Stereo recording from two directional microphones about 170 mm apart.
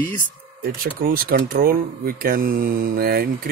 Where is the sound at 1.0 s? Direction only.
55° right (ahead or behind).